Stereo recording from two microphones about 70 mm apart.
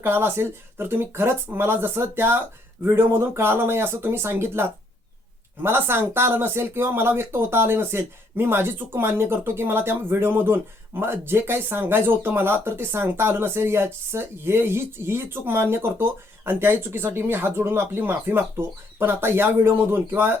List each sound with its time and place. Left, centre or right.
0.0 s speech: right